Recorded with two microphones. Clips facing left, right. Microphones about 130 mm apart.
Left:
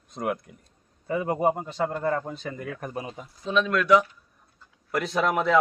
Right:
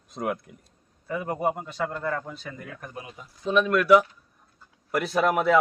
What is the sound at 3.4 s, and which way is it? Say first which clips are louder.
A man's voice: right 2 dB; 10° right (ahead or behind).